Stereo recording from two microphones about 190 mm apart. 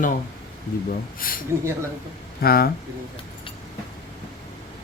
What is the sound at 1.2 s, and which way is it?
Speech, 45° left (ahead or behind).